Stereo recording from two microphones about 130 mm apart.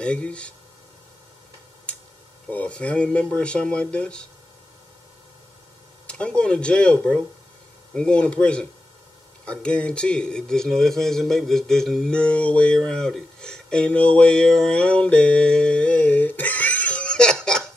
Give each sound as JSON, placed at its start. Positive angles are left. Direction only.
{"t": 0.0, "sound": "speech", "side_deg": 10}
{"t": 2.5, "sound": "speech", "side_deg": 10}
{"t": 6.0, "sound": "speech", "side_deg": 10}